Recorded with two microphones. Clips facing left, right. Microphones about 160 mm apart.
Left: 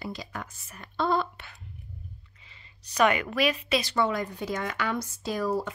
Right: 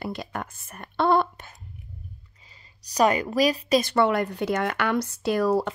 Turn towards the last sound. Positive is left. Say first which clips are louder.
# right 6 dB
turn(degrees=-75)  # may be behind; listen again after turning